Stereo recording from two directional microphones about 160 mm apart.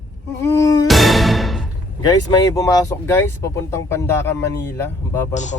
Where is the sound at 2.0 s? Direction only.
20° left (ahead or behind).